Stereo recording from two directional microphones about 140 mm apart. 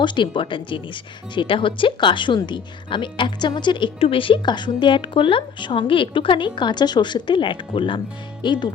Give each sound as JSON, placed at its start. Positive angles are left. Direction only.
{"t": 0.0, "sound": "speech", "side_deg": 35}